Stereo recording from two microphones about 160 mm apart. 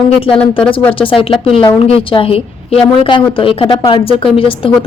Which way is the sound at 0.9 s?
35° left (ahead or behind).